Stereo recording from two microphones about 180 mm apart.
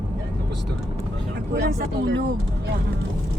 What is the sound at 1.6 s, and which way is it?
Speech, 70° right (ahead or behind).